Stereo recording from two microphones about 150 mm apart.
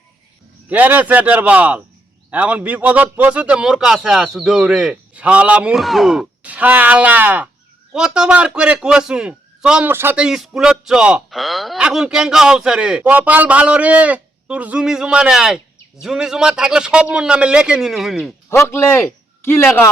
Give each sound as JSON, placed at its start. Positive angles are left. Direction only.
{"t": 0.7, "sound": "a man's voice", "side_deg": -10}
{"t": 18.5, "sound": "a man's voice", "side_deg": 20}